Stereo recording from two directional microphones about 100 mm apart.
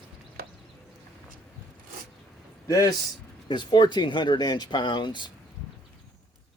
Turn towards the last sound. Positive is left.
turn(degrees=50)  # may be behind; listen again after turning